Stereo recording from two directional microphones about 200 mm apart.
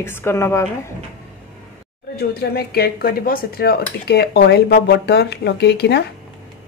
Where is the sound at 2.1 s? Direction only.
50° left (ahead or behind).